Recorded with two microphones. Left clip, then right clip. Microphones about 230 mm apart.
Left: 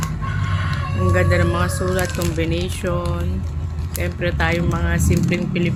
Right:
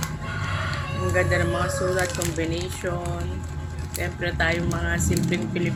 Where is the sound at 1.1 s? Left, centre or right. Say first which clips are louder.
Left 3 dB; left.